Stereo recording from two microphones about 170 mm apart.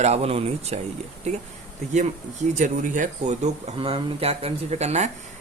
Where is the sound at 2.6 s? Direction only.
50° right (ahead or behind).